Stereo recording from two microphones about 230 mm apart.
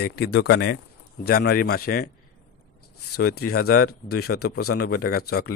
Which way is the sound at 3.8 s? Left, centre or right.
Left.